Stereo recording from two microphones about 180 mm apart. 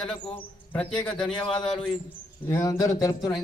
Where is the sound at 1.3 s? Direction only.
25° left (ahead or behind).